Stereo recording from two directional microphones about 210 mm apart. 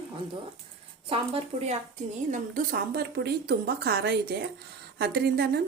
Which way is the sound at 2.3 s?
40° right (ahead or behind).